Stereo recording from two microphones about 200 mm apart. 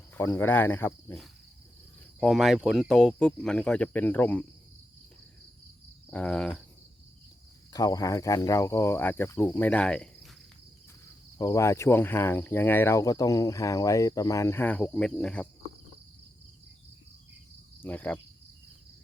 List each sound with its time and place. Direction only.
0.1 s speech: 10° left (ahead or behind)
2.2 s speech: centre (ahead or behind)
6.1 s speech: 5° left (ahead or behind)
7.7 s speech: 20° left (ahead or behind)
11.3 s speech: 15° left (ahead or behind)
17.8 s speech: 10° left (ahead or behind)